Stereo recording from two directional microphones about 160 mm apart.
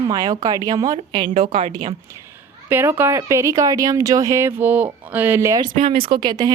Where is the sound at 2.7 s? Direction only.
15° right (ahead or behind).